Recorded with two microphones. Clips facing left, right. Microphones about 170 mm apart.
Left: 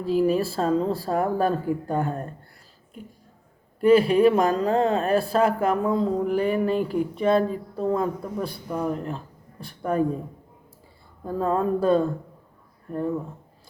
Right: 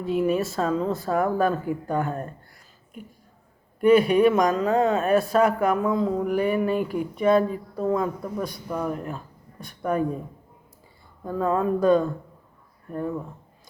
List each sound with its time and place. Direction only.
0.0 s speech: 35° left (ahead or behind)
3.8 s speech: 30° left (ahead or behind)
11.3 s speech: 35° left (ahead or behind)